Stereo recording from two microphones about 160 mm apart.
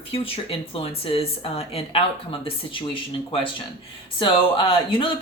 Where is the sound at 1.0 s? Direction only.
35° left (ahead or behind).